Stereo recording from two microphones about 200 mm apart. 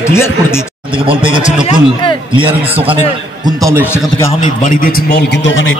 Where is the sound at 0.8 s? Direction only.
25° right (ahead or behind).